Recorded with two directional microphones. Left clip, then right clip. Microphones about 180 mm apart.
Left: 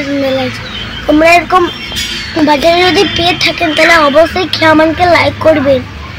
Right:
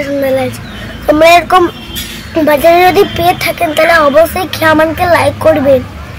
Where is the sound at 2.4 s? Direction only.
45° right (ahead or behind).